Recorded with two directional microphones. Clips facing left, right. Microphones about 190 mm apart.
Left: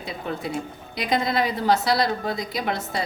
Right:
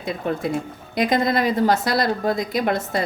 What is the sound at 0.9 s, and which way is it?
A woman's voice, 45° right (ahead or behind).